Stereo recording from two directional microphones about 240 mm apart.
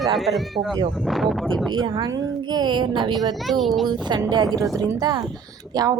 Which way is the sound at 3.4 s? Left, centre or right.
Centre.